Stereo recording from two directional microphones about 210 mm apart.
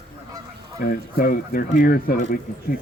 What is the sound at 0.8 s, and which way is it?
Speech, 45° left (ahead or behind).